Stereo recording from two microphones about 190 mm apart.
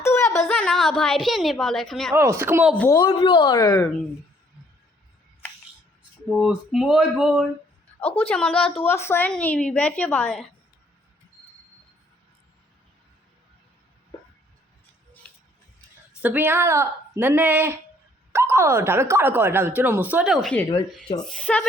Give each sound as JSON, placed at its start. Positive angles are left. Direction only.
{"t": 0.0, "sound": "a sound", "side_deg": 15}
{"t": 0.3, "sound": "a woman's voice", "side_deg": 5}
{"t": 2.1, "sound": "speech", "side_deg": -15}
{"t": 2.7, "sound": "a woman's voice", "side_deg": 10}
{"t": 3.0, "sound": "speech", "side_deg": 25}
{"t": 6.4, "sound": "a woman's voice", "side_deg": 0}
{"t": 16.2, "sound": "speech", "side_deg": -10}